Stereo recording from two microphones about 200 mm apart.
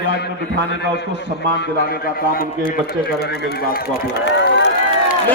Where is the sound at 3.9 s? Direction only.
60° left (ahead or behind).